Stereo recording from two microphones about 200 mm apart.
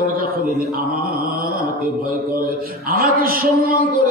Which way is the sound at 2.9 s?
45° right (ahead or behind).